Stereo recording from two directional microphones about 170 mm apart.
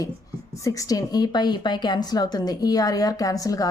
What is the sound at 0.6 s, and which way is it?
A woman's voice, 20° left (ahead or behind).